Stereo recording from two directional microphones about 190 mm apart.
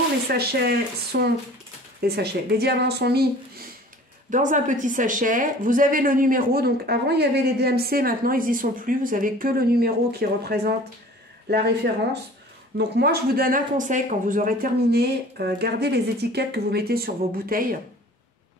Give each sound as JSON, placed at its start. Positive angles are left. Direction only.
{"t": 0.3, "sound": "speech", "side_deg": -55}
{"t": 4.3, "sound": "speech", "side_deg": -40}